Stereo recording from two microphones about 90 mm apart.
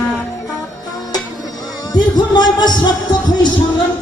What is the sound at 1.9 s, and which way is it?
Speech, 50° left (ahead or behind).